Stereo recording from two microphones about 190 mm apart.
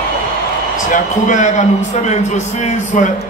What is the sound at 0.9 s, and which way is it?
Speech, 40° left (ahead or behind).